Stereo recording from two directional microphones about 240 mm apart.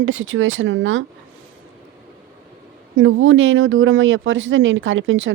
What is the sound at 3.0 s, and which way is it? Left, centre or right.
Speech, right.